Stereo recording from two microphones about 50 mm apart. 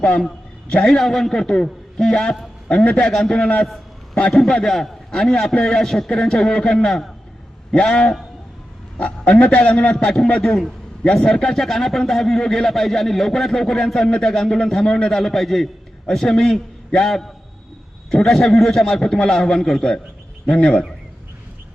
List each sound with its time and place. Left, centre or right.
0.0 s a man's voice: left
0.8 s a man's voice: centre
2.7 s a man's voice: left
3.0 s a man's voice: centre
3.3 s a man's voice: left
3.6 s a man's voice: centre
9.0 s a man's voice: left
9.6 s a man's voice: centre